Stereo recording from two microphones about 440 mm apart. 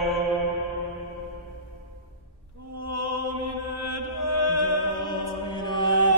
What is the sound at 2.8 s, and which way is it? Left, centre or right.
Mantra, right.